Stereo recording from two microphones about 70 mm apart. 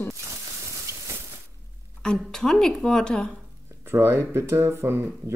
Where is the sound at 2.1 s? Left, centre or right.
Centre.